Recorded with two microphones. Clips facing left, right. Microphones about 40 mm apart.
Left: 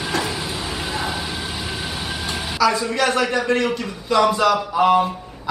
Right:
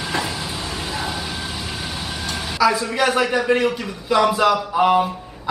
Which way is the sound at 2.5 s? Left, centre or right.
Centre.